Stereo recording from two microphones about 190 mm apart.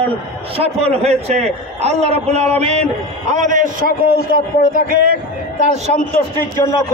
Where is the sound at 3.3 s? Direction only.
45° right (ahead or behind).